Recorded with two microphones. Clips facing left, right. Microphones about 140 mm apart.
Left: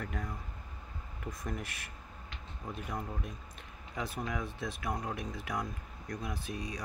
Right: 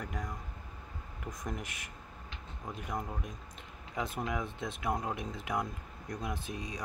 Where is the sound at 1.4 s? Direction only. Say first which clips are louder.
Even; 20° right (ahead or behind).